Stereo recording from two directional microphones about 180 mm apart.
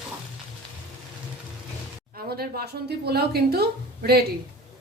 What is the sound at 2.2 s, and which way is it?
A woman's voice, 60° right (ahead or behind).